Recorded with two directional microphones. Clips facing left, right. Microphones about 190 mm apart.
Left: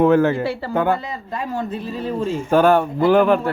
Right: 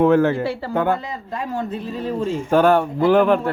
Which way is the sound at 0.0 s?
10° left (ahead or behind).